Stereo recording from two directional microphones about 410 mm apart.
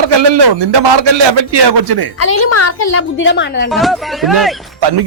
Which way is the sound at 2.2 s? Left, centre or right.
Left.